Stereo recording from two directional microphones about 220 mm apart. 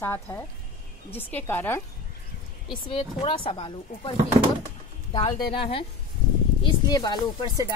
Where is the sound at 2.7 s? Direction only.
25° left (ahead or behind).